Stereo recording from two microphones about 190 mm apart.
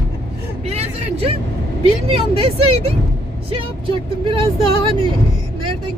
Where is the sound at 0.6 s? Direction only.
30° right (ahead or behind).